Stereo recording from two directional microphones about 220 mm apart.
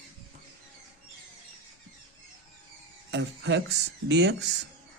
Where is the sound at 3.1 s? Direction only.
50° right (ahead or behind).